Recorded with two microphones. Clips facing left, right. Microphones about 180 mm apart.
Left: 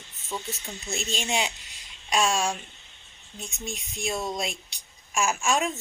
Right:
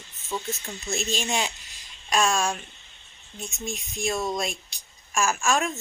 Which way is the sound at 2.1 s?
20° left (ahead or behind).